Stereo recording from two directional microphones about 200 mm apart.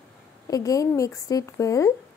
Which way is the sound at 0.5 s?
15° left (ahead or behind).